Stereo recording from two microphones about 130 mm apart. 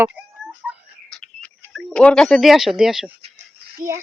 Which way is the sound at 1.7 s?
Centre (ahead or behind).